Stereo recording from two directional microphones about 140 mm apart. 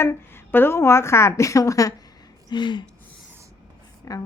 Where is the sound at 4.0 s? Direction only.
25° left (ahead or behind).